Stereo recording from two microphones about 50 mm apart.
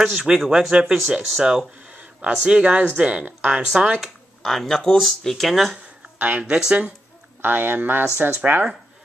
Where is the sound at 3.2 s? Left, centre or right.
Right.